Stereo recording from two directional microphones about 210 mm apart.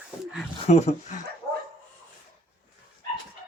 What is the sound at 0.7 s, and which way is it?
Speech, 30° left (ahead or behind).